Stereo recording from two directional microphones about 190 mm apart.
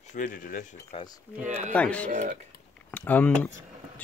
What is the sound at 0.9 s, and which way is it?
Speech, 25° left (ahead or behind).